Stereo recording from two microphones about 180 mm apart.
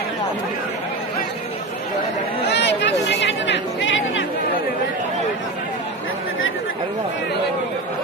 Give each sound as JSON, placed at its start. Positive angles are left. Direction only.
{"t": 2.5, "sound": "chatter", "side_deg": 75}